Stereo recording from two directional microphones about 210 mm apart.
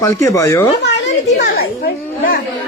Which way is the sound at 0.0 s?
15° left (ahead or behind).